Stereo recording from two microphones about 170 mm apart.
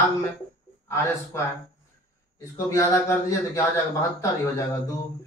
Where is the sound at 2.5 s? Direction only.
20° left (ahead or behind).